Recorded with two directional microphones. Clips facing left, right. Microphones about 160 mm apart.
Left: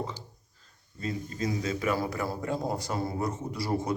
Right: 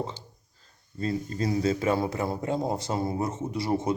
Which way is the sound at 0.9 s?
35° right (ahead or behind).